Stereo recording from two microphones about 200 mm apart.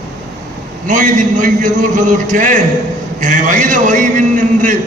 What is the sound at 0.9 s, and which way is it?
A man's voice, 40° right (ahead or behind).